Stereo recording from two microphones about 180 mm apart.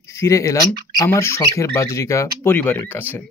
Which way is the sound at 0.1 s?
15° left (ahead or behind).